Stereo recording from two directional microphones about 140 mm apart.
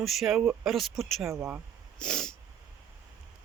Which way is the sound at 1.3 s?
20° right (ahead or behind).